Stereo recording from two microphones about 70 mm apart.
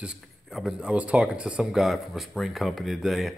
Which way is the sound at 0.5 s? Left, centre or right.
Centre.